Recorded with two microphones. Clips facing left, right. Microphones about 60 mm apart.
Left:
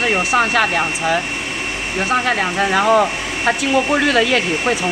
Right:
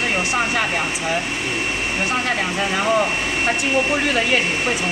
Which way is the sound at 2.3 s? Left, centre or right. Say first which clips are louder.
Left 4 dB; left.